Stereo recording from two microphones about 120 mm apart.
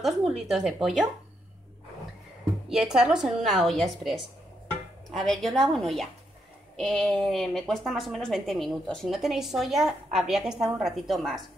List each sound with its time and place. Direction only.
0.0 s a woman's voice: centre (ahead or behind)
2.7 s a woman's voice: 5° right (ahead or behind)